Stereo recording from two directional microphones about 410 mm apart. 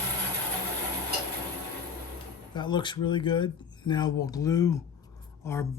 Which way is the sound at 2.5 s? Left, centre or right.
Centre.